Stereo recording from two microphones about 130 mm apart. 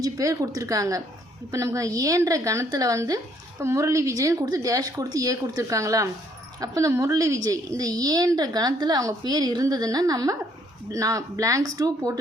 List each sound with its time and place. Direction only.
0.0 s a woman's voice: 25° right (ahead or behind)